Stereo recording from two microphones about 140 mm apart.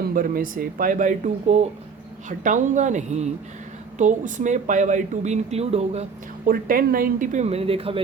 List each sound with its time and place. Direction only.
0.1 s speech: 85° right; by 6.1 s 50° right (ahead or behind)
6.4 s speech: 90° right; by 8.0 s 45° right (ahead or behind)